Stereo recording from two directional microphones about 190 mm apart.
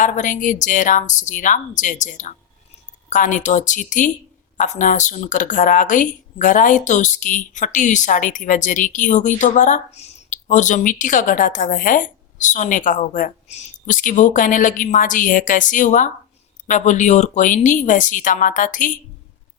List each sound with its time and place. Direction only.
0.0 s speech: 40° left (ahead or behind)